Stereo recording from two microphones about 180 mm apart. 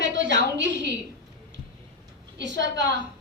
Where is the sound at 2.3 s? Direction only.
80° right.